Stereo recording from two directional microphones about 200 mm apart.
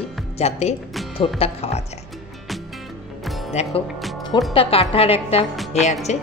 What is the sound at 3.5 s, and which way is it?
A woman's voice, 35° left (ahead or behind).